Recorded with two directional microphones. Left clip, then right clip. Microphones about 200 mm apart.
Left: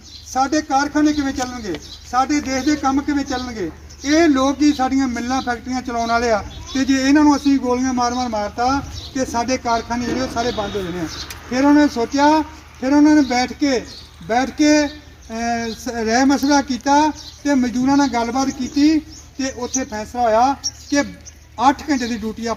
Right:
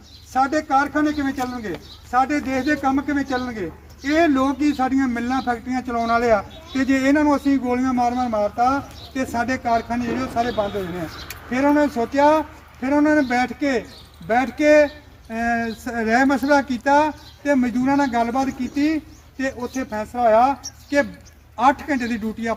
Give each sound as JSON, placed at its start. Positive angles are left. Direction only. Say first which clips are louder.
{"t": 0.3, "sound": "a man's voice", "louder": "left 1 dB", "side_deg": 5}
{"t": 7.3, "sound": "speech", "louder": "left 3 dB", "side_deg": -20}
{"t": 11.5, "sound": "speech", "louder": "left 3 dB", "side_deg": -10}